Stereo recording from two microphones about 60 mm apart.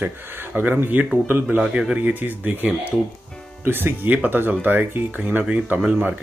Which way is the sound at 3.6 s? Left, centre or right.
Right.